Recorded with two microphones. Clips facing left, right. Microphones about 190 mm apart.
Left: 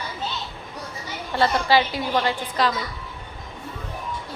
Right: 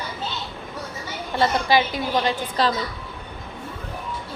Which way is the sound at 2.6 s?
30° right (ahead or behind).